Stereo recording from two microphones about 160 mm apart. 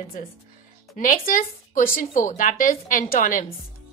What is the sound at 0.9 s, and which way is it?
A woman's voice, 60° left (ahead or behind).